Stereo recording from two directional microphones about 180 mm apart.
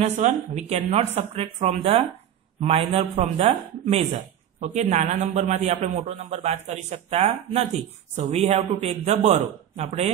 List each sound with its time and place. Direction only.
0.0 s speech: 40° right (ahead or behind)